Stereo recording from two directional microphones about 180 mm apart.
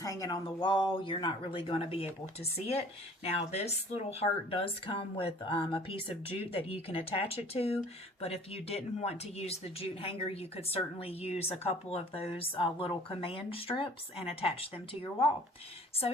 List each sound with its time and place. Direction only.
0.0 s speech: 20° left (ahead or behind)